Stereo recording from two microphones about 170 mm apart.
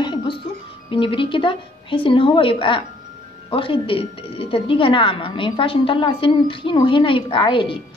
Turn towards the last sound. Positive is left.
turn(degrees=30)  # may be behind; listen again after turning